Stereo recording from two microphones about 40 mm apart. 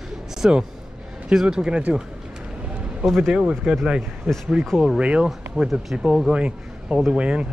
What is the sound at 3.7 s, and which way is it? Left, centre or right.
Speech, centre.